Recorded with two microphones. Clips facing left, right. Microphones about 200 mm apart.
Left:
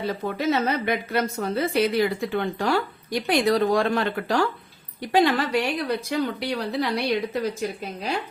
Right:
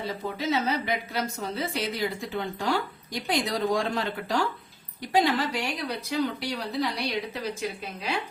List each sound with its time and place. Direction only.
0.3 s a woman's voice: 55° left (ahead or behind)
7.6 s speech: 40° left (ahead or behind)